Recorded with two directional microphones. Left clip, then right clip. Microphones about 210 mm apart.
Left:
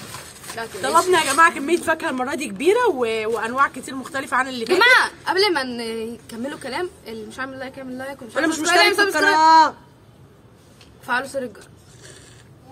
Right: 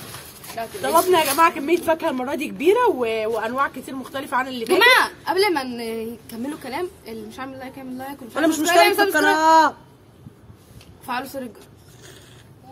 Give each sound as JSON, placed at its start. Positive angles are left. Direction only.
{"t": 0.8, "sound": "a woman's voice", "side_deg": 15}
{"t": 4.6, "sound": "a woman's voice", "side_deg": 0}
{"t": 8.4, "sound": "speech", "side_deg": -15}
{"t": 8.6, "sound": "a woman's voice", "side_deg": 0}
{"t": 9.4, "sound": "speech", "side_deg": -15}
{"t": 11.1, "sound": "a woman's voice", "side_deg": 0}